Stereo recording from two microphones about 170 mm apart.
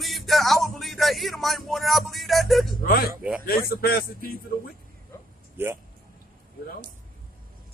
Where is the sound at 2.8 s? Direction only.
60° left (ahead or behind).